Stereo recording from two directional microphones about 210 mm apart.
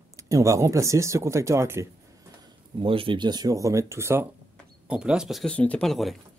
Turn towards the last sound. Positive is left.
turn(degrees=0)  # may be behind; listen again after turning